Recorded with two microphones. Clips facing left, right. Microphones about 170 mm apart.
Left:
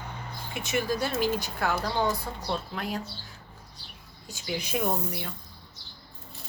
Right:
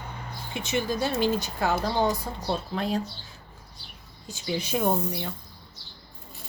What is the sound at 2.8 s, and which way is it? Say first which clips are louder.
Speech: right 5 dB; 25° right (ahead or behind).